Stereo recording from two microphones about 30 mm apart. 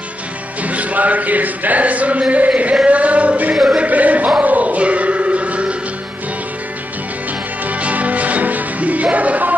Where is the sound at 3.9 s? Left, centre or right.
Right.